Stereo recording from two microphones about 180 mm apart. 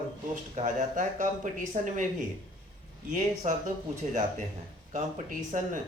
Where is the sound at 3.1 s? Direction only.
45° right (ahead or behind).